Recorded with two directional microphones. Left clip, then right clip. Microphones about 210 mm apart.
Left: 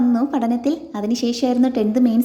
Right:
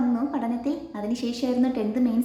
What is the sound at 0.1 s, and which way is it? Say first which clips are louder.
A woman's voice: left 7 dB; 40° left (ahead or behind).